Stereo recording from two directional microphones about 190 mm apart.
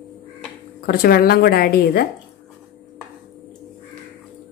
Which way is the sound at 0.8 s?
55° left (ahead or behind).